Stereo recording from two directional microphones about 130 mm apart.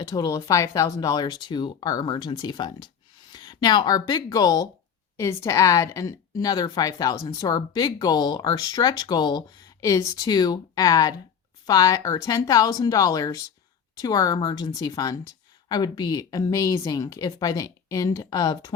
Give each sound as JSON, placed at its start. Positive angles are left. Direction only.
{"t": 0.1, "sound": "a woman's voice", "side_deg": 25}